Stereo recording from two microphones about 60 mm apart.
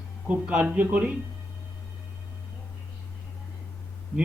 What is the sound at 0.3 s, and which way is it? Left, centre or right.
Speech, right.